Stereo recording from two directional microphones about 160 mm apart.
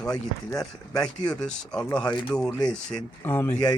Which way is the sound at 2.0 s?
30° left (ahead or behind).